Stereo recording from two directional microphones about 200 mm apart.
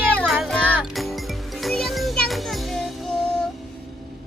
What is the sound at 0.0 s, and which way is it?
Music, 5° left (ahead or behind).